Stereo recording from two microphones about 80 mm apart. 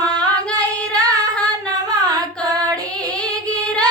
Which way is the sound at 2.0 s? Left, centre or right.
Right.